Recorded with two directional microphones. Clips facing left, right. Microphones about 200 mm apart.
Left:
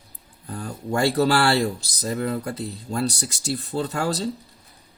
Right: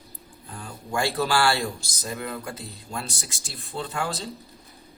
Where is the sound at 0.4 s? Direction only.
40° left (ahead or behind).